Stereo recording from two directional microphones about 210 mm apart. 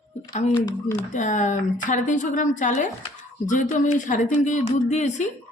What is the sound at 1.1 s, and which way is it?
A woman's voice, 35° left (ahead or behind).